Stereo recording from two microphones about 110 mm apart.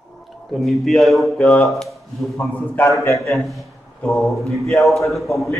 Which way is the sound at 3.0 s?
25° left (ahead or behind).